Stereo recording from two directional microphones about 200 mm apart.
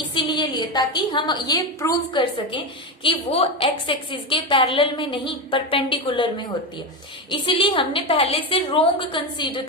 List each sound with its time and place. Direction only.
0.1 s a woman's voice: 25° left (ahead or behind)